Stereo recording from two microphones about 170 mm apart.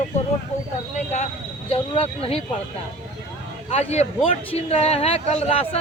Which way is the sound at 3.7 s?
40° left (ahead or behind).